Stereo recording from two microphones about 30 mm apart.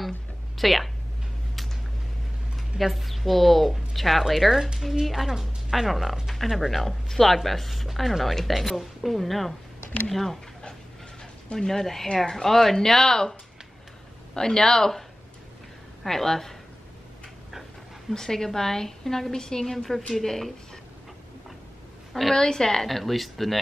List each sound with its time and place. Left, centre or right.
0.6 s a woman's voice: centre
2.8 s a woman's voice: centre
11.5 s a woman's voice: centre
18.1 s a woman's voice: centre
19.6 s a woman's voice: centre
22.3 s speech: left
22.8 s a woman's voice: centre